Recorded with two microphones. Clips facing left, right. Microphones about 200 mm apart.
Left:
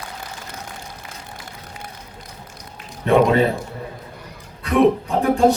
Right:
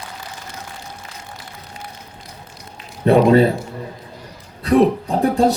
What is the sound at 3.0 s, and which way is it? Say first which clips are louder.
Speech: right 3 dB; 35° right (ahead or behind).